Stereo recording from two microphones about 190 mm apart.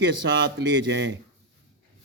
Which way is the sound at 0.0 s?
70° right (ahead or behind).